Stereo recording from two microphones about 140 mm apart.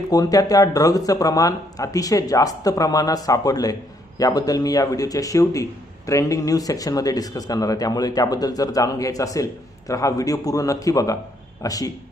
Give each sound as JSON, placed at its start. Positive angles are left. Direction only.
{"t": 0.1, "sound": "speech", "side_deg": 25}